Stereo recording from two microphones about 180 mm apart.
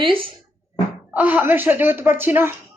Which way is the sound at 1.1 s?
10° right (ahead or behind).